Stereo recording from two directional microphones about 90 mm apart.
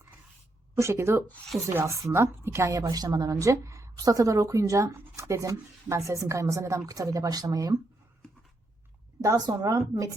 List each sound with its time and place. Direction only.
0.8 s a woman's voice: 30° right (ahead or behind)
9.5 s a woman's voice: 40° right (ahead or behind)